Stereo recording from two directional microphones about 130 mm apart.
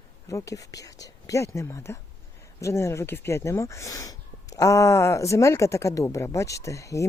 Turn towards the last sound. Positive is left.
turn(degrees=25)  # may be behind; listen again after turning